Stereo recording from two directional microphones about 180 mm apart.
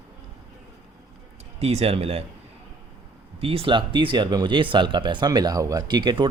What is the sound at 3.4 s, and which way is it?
Speech, 30° right (ahead or behind).